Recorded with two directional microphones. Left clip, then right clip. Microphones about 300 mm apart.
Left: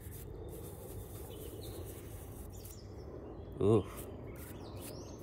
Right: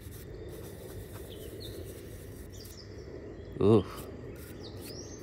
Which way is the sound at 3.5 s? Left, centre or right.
Right.